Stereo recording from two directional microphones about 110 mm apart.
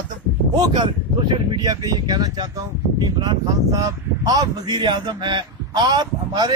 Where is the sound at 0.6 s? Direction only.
45° right (ahead or behind).